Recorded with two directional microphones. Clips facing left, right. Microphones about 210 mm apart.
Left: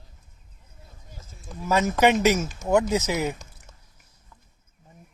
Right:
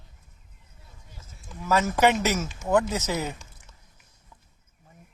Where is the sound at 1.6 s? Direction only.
15° left (ahead or behind).